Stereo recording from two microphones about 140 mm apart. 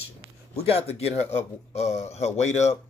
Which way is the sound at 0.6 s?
45° left (ahead or behind).